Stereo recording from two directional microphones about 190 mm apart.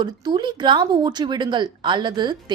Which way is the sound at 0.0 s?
25° right (ahead or behind).